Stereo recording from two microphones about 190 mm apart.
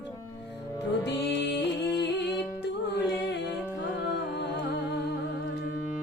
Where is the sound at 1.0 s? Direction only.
65° left (ahead or behind).